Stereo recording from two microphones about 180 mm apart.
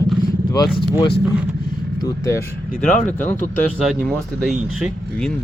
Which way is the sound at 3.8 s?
5° right (ahead or behind).